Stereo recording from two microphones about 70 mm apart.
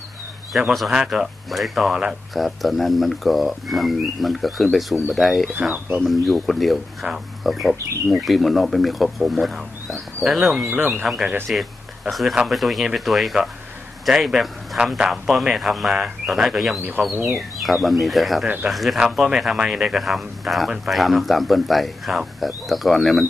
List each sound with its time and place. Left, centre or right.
0.5 s speech: centre
5.5 s speech: right
6.2 s speech: centre
10.7 s speech: right
11.4 s speech: centre
17.1 s speech: right
17.4 s speech: centre